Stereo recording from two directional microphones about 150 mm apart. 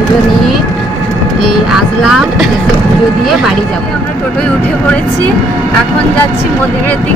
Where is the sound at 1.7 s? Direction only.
5° right (ahead or behind).